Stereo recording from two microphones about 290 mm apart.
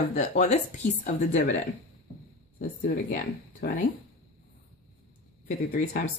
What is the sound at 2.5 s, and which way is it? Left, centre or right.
A woman's voice, left.